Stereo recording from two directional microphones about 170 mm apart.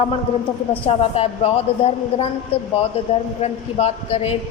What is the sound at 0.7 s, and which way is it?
A man's voice, 35° left (ahead or behind).